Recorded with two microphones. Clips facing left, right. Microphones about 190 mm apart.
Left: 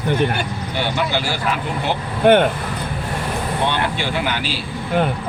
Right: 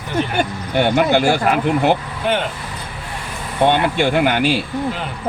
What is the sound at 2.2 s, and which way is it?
Speech, 55° left (ahead or behind).